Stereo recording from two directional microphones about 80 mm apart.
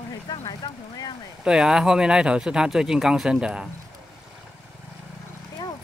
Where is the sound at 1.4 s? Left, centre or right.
Centre.